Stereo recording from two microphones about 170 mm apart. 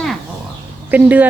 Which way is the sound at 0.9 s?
10° right (ahead or behind).